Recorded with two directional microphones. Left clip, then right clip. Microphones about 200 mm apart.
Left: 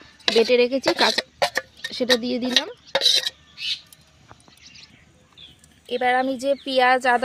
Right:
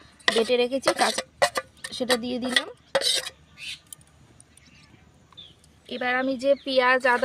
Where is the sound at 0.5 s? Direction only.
35° left (ahead or behind).